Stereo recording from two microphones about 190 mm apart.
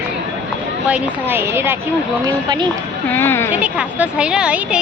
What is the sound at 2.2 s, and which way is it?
Speech, 20° right (ahead or behind).